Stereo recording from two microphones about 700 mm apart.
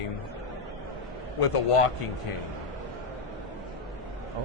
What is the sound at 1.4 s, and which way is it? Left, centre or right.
Speech, left.